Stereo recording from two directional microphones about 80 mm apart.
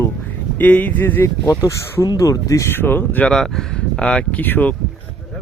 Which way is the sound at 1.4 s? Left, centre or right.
Left.